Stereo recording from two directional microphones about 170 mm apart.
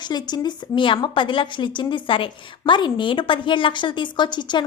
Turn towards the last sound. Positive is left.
turn(degrees=25)  # may be behind; listen again after turning